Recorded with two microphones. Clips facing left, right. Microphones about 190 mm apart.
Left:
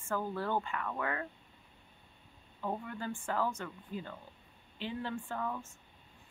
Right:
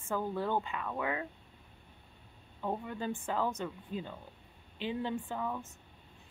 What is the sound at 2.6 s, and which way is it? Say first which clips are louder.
Speech: right 2 dB; 20° right (ahead or behind).